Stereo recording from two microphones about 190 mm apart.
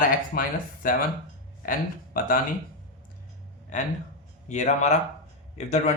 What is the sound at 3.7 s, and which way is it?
Speech, 40° left (ahead or behind).